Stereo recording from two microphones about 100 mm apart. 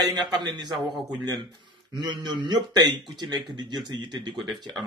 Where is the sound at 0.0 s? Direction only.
45° right (ahead or behind).